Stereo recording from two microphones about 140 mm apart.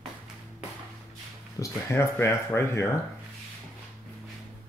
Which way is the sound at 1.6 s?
20° left (ahead or behind).